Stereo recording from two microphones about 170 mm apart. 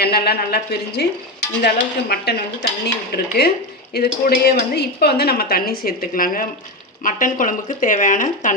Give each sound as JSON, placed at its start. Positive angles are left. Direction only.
{"t": 0.0, "sound": "a woman's voice", "side_deg": 70}